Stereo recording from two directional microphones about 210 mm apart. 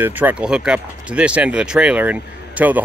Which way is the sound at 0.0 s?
10° right (ahead or behind).